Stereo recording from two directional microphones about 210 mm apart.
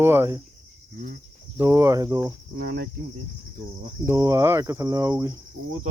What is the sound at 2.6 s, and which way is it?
Cricket, 50° right (ahead or behind).